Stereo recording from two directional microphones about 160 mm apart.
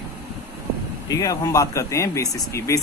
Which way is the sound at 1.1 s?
20° left (ahead or behind).